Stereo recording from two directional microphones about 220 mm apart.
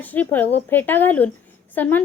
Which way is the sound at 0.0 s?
10° left (ahead or behind).